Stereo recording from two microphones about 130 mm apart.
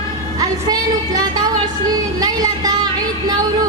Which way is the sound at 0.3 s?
30° right (ahead or behind).